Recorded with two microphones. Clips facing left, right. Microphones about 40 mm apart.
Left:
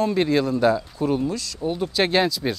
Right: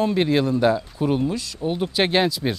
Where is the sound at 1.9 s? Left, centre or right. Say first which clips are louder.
Even; centre.